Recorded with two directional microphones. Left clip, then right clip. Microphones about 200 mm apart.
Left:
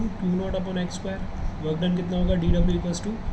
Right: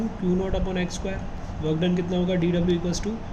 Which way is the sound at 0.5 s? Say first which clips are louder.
Right 1 dB; 45° right (ahead or behind).